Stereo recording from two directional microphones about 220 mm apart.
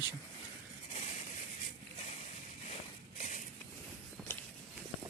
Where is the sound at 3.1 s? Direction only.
35° left (ahead or behind).